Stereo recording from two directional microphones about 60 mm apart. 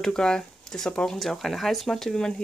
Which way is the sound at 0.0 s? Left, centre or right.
Centre.